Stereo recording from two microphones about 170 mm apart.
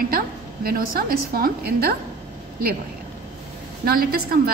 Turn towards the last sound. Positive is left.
turn(degrees=-60)  # may be behind; listen again after turning